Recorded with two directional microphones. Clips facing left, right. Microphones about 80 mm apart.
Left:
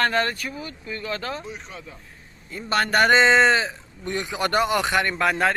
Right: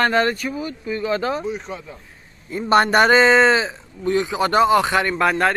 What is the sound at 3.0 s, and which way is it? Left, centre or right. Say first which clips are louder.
Speech: even; centre.